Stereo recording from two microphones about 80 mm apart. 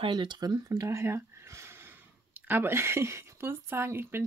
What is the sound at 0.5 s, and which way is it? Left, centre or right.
Speech, right.